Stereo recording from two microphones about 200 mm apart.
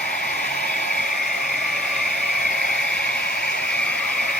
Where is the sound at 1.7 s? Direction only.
5° left (ahead or behind).